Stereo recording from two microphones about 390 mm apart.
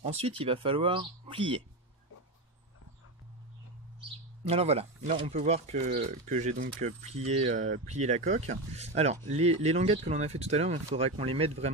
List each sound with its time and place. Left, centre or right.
0.0 s speech: centre
4.5 s speech: centre